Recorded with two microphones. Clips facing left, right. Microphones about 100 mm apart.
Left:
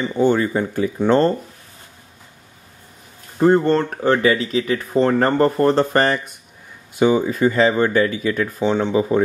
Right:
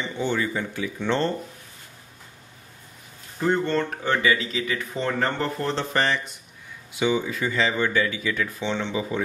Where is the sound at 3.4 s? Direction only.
40° left (ahead or behind).